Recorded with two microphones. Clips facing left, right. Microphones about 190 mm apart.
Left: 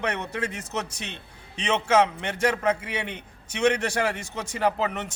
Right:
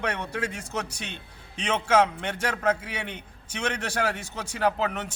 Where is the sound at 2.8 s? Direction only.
5° right (ahead or behind).